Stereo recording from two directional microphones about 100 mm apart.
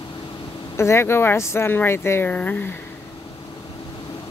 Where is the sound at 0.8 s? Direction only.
25° left (ahead or behind).